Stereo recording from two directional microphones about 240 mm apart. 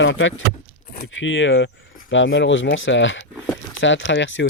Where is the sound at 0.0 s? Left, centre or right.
Left.